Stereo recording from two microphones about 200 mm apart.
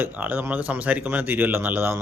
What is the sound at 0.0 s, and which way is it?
Speech, 10° right (ahead or behind).